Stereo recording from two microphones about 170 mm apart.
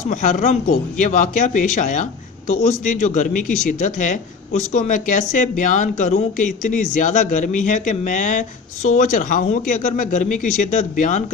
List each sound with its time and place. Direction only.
0.1 s speech: 50° left (ahead or behind)